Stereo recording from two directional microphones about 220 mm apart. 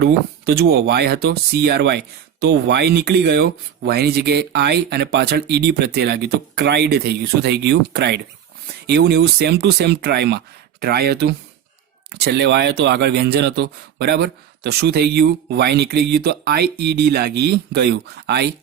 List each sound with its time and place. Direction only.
0.0 s speech: 45° right (ahead or behind)